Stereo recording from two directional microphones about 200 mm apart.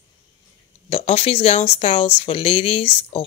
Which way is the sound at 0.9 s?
30° left (ahead or behind).